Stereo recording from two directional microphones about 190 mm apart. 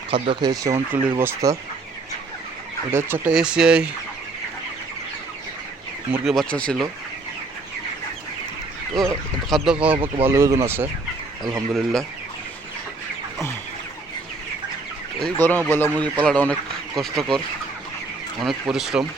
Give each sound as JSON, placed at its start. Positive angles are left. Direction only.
{"t": 0.1, "sound": "speech", "side_deg": -25}
{"t": 2.9, "sound": "speech", "side_deg": -10}
{"t": 6.2, "sound": "speech", "side_deg": 0}
{"t": 9.0, "sound": "speech", "side_deg": 0}
{"t": 11.7, "sound": "speech", "side_deg": 0}
{"t": 15.2, "sound": "a man's voice", "side_deg": 10}
{"t": 18.3, "sound": "speech", "side_deg": 0}